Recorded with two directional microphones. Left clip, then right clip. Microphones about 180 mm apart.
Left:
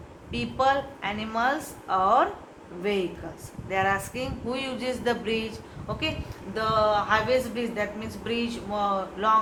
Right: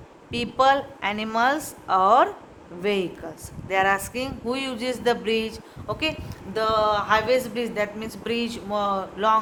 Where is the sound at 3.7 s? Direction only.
60° right (ahead or behind).